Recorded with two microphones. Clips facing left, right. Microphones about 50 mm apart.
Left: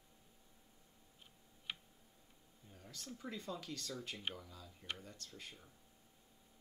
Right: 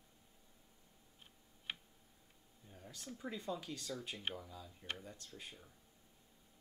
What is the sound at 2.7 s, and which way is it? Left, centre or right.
Speech, centre.